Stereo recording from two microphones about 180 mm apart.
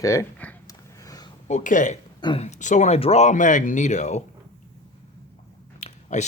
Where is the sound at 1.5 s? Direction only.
45° left (ahead or behind).